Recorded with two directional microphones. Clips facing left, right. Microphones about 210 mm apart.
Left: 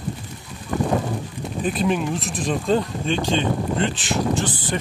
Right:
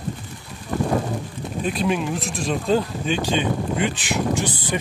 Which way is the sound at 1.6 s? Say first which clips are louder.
Left 1 dB; centre (ahead or behind).